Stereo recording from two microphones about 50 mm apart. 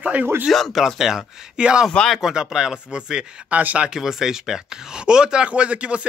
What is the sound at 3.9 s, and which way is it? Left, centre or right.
Speech, centre.